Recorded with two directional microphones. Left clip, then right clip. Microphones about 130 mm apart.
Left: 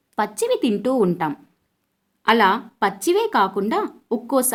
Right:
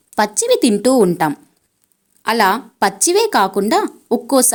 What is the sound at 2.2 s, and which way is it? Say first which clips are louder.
A woman's voice: right 2 dB; 50° right (ahead or behind).